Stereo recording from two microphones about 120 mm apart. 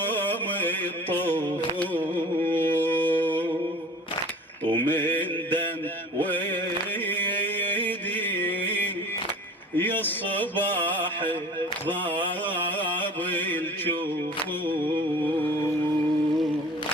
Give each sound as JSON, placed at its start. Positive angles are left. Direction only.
{"t": 0.0, "sound": "carnatic music", "side_deg": 15}
{"t": 1.8, "sound": "music", "side_deg": 15}
{"t": 4.8, "sound": "mantra", "side_deg": 15}
{"t": 6.1, "sound": "music", "side_deg": 15}
{"t": 7.1, "sound": "a sound", "side_deg": 15}
{"t": 9.7, "sound": "music", "side_deg": 15}